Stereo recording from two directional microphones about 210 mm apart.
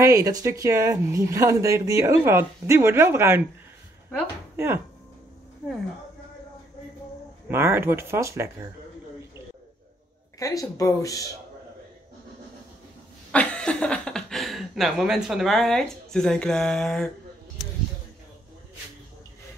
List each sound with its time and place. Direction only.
0.0 s speech: 15° right (ahead or behind)
7.4 s speech: 10° right (ahead or behind)
10.4 s speech: 15° left (ahead or behind)
13.3 s speech: 5° left (ahead or behind)